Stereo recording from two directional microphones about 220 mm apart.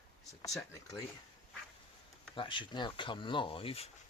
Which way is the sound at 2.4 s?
20° left (ahead or behind).